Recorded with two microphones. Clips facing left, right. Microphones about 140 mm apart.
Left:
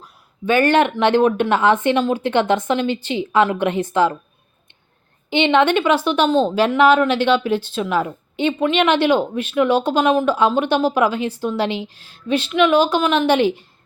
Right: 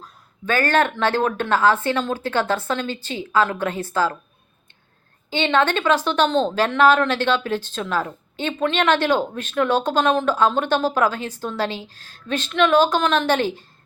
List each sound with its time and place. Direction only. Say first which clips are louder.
0.0 s a woman's voice: left 5 dB; 15° left (ahead or behind)
5.3 s speech: left 4 dB; 15° left (ahead or behind)